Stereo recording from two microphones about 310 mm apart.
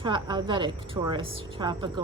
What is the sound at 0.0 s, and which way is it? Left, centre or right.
A woman's voice, centre.